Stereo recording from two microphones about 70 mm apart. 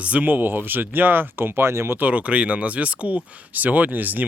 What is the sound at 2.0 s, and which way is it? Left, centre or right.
Speech, right.